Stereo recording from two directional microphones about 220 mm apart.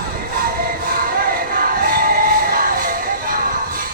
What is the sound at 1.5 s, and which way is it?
Music, 40° right (ahead or behind).